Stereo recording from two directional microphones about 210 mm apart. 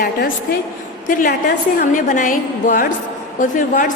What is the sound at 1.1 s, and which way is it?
A woman's voice, 40° left (ahead or behind).